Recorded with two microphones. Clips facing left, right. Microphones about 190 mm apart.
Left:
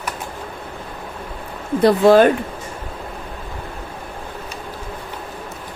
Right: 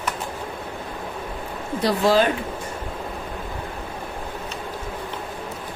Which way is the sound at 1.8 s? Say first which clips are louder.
Left 7 dB; 55° left (ahead or behind).